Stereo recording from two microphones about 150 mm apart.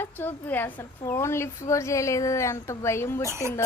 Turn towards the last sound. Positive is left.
turn(degrees=-20)  # may be behind; listen again after turning